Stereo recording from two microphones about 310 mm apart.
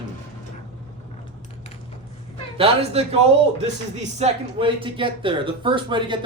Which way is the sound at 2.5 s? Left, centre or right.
Centre.